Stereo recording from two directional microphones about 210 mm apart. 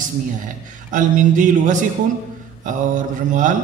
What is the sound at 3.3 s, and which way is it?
Speech, 35° right (ahead or behind).